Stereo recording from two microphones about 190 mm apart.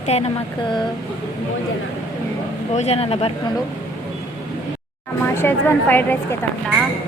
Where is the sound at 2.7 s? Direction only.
35° left (ahead or behind).